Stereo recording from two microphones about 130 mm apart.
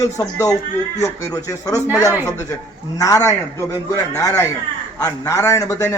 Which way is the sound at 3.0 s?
25° left (ahead or behind).